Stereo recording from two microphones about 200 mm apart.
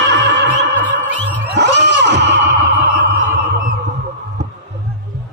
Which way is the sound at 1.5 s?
60° right (ahead or behind).